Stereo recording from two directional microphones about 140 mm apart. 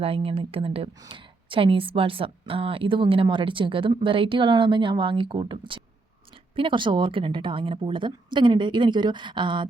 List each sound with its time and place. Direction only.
0.0 s a woman's voice: 45° right (ahead or behind)